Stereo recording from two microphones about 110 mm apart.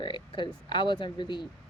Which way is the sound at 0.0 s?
45° left (ahead or behind).